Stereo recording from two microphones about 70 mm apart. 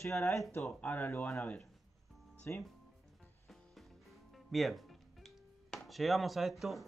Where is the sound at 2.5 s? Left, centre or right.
Left.